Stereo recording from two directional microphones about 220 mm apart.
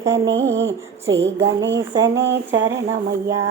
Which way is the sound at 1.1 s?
55° right (ahead or behind).